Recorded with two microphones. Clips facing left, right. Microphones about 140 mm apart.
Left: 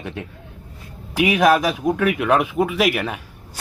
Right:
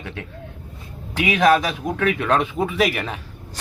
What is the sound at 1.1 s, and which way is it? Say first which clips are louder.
Speech: left 1 dB; 15° left (ahead or behind).